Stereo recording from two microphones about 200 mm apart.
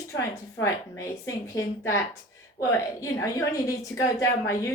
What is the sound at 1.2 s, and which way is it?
Speech, 15° left (ahead or behind).